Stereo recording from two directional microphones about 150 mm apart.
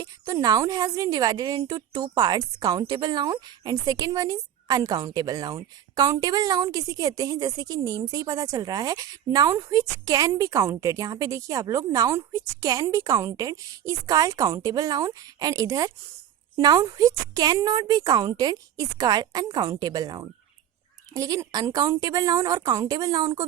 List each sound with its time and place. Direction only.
0.0 s a woman's voice: 25° right (ahead or behind)